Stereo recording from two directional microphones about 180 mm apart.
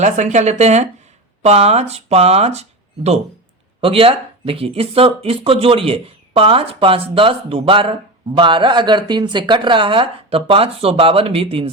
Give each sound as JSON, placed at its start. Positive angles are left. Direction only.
{"t": 0.0, "sound": "a woman's voice", "side_deg": -40}